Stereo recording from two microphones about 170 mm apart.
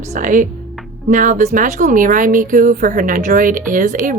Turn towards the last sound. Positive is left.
turn(degrees=-50)  # may be behind; listen again after turning